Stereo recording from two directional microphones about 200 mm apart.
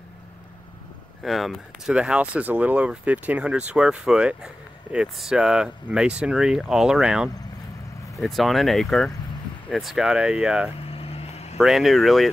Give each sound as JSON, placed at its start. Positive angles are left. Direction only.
{"t": 1.2, "sound": "speech", "side_deg": 0}
{"t": 11.0, "sound": "vehicle", "side_deg": 30}
{"t": 11.5, "sound": "speech", "side_deg": 0}